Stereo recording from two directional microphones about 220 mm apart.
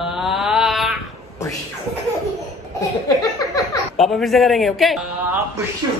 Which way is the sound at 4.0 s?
Centre (ahead or behind).